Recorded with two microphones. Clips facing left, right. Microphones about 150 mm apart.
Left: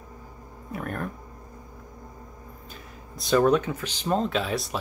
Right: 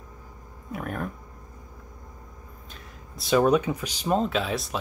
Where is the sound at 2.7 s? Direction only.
Centre (ahead or behind).